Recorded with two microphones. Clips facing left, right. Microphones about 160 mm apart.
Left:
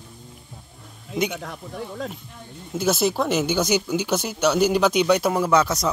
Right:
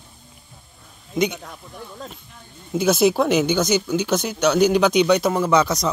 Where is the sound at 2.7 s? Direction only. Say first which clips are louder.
Right 4 dB; centre (ahead or behind).